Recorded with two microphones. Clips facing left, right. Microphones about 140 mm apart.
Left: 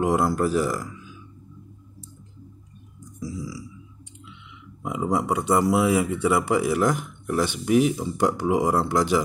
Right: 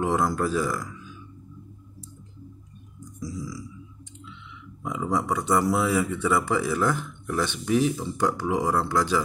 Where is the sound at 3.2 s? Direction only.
10° left (ahead or behind).